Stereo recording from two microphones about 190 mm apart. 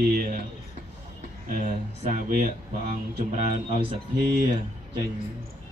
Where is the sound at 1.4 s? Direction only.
50° right (ahead or behind).